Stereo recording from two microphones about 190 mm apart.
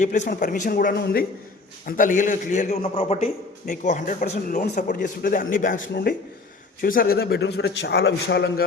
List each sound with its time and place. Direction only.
0.3 s a man's voice: 40° left (ahead or behind); by 8.6 s 60° left (ahead or behind)